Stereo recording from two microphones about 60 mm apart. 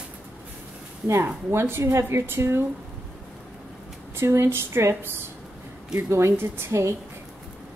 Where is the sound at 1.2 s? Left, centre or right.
Right.